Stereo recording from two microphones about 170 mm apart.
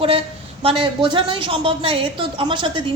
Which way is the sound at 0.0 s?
35° right (ahead or behind).